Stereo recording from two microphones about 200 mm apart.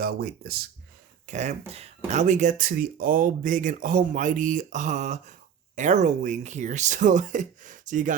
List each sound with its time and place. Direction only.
0.0 s speech: 50° right (ahead or behind)
1.3 s speech: 35° right (ahead or behind)